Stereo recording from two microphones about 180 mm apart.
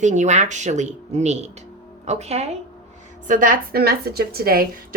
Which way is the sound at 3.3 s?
50° right (ahead or behind).